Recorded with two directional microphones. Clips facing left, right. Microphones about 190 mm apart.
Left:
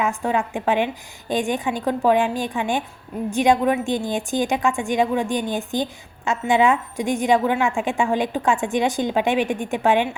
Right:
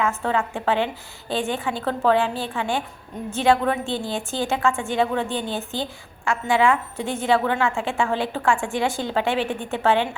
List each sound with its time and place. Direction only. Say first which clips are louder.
0.0 s a woman's voice: left 1 dB; 15° left (ahead or behind)